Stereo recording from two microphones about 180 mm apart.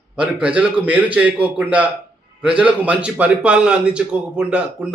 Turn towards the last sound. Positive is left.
turn(degrees=-5)  # may be behind; listen again after turning